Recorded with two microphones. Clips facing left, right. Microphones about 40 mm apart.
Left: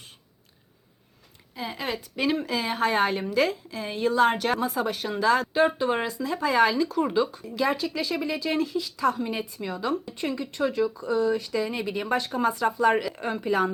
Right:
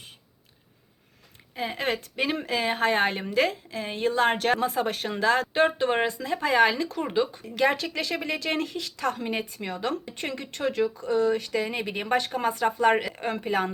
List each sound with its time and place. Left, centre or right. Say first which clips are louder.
1.5 s speech: right 3 dB; right
2.3 s speech: even; right
5.5 s speech: even; right
7.0 s speech: even; right
7.5 s speech: right 2 dB; right